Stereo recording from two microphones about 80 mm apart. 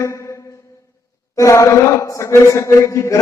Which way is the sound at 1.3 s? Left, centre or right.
Left.